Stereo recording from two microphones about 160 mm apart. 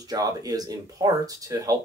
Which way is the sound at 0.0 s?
25° right (ahead or behind).